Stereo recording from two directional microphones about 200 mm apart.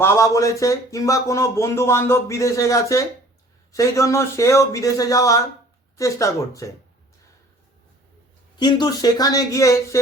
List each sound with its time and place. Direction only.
0.0 s speech: 15° left (ahead or behind)
8.5 s speech: 20° left (ahead or behind)